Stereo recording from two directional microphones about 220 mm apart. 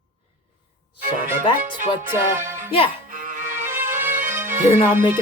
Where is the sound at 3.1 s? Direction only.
40° right (ahead or behind).